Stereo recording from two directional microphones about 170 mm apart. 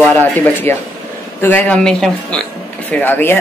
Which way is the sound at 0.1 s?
10° left (ahead or behind).